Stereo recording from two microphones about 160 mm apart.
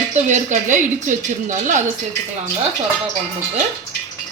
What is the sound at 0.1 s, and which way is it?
Speech, 50° right (ahead or behind).